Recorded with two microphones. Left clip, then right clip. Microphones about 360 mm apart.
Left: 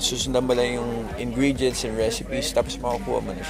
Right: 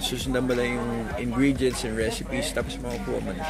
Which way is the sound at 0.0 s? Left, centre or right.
Centre.